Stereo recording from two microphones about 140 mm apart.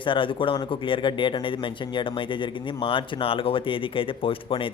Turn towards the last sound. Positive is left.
turn(degrees=40)  # may be behind; listen again after turning